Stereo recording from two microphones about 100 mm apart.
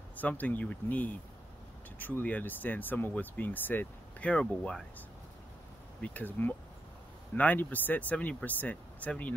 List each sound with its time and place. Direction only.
0.1 s speech: 15° left (ahead or behind)
5.9 s speech: 15° left (ahead or behind)